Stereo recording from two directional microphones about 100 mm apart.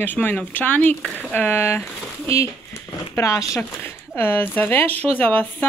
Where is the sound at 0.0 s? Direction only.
20° left (ahead or behind).